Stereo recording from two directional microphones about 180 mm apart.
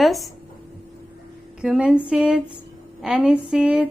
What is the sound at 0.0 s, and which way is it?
Speech, centre (ahead or behind).